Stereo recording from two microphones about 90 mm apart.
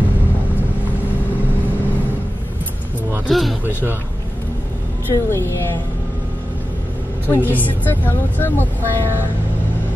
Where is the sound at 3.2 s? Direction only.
Centre (ahead or behind).